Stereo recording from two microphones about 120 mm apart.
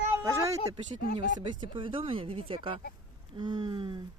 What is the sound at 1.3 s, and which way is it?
Speech, 45° right (ahead or behind).